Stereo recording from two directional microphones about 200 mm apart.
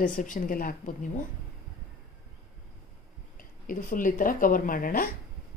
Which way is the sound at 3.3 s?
45° left (ahead or behind).